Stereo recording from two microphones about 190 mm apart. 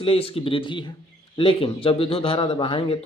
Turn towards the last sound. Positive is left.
turn(degrees=30)  # may be behind; listen again after turning